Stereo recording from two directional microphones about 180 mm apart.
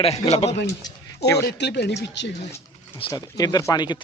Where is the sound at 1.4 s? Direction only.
70° left (ahead or behind).